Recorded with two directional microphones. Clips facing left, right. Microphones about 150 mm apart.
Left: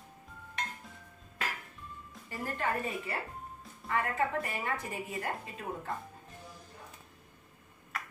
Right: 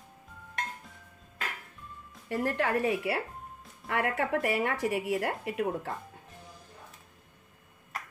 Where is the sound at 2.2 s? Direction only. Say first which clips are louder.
Right 6 dB; 70° right (ahead or behind).